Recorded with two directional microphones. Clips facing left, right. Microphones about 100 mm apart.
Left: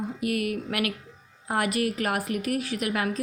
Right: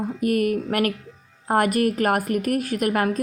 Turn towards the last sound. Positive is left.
turn(degrees=-45)  # may be behind; listen again after turning